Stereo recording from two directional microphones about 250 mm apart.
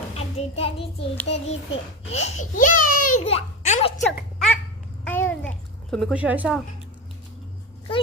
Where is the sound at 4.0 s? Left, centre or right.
Centre.